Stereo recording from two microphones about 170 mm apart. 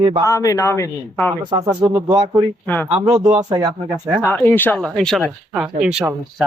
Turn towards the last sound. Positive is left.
turn(degrees=-5)  # may be behind; listen again after turning